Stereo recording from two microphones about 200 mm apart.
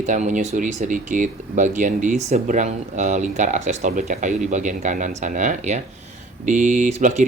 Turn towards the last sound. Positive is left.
turn(degrees=-35)  # may be behind; listen again after turning